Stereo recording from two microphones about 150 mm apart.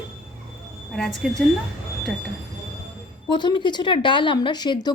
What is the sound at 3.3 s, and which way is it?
Speech, 30° left (ahead or behind).